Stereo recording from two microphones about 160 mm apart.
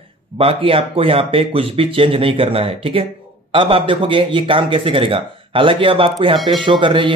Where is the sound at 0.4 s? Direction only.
35° right (ahead or behind).